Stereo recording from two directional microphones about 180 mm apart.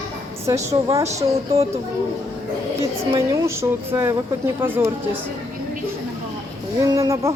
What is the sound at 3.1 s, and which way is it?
Speech, 15° right (ahead or behind).